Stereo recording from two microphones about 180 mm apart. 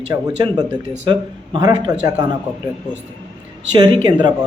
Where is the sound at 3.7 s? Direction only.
25° right (ahead or behind).